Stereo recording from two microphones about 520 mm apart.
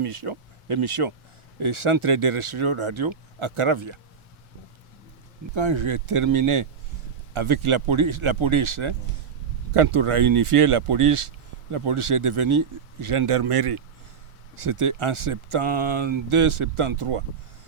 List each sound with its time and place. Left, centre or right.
0.0 s speech: right
5.5 s speech: right
9.7 s speech: right
14.5 s speech: right